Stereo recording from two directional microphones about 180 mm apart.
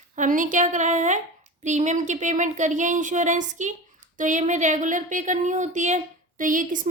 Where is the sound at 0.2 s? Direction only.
45° right (ahead or behind).